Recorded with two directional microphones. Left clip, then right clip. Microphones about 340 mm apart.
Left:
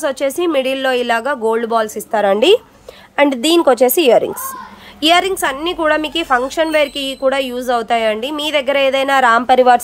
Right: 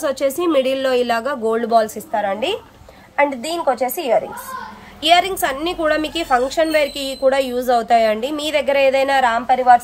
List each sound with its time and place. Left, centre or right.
0.0 s a woman's voice: centre
3.2 s a woman's voice: left
5.0 s a woman's voice: centre